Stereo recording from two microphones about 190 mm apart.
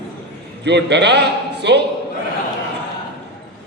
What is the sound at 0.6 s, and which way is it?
A man's voice, 65° right (ahead or behind).